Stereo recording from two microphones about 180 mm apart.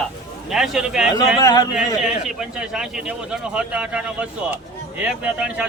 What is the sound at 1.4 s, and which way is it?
Speech, 20° left (ahead or behind).